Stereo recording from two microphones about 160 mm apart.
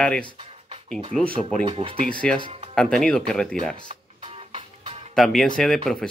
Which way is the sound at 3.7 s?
35° right (ahead or behind).